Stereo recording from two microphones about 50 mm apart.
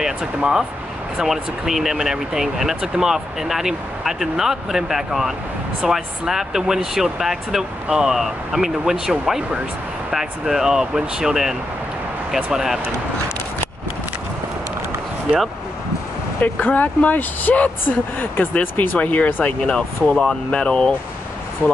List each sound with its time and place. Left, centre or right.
0.0 s speech: centre
12.5 s speech: centre
16.3 s speech: left
18.5 s speech: left
19.7 s speech: centre